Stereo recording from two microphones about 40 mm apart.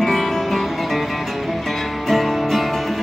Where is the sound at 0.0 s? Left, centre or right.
Centre.